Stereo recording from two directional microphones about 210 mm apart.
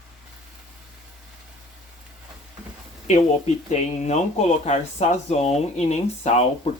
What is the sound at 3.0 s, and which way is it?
Speech, 30° left (ahead or behind).